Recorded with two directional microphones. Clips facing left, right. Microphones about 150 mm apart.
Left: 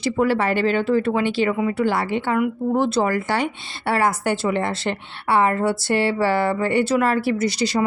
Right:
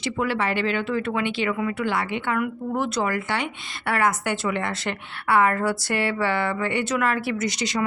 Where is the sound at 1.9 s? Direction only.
35° left (ahead or behind).